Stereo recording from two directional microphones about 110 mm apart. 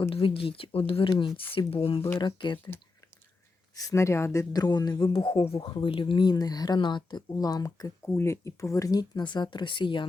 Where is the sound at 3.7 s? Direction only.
30° left (ahead or behind).